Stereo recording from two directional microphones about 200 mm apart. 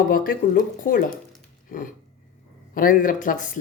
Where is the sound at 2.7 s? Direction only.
45° left (ahead or behind).